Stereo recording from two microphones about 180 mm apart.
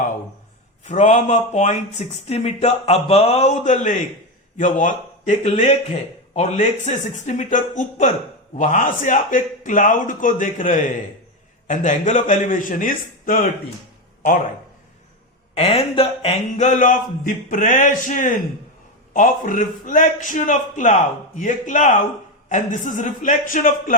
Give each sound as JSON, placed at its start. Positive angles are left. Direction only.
{"t": 0.9, "sound": "speech", "side_deg": 40}
{"t": 15.5, "sound": "speech", "side_deg": 35}